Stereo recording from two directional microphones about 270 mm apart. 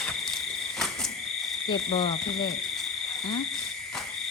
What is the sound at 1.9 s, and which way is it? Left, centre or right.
Owl, centre.